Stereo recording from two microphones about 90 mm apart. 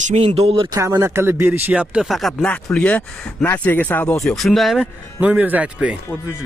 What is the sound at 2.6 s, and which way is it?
Speech, 15° left (ahead or behind).